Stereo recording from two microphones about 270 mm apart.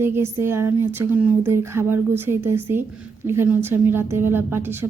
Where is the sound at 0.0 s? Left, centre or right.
Centre.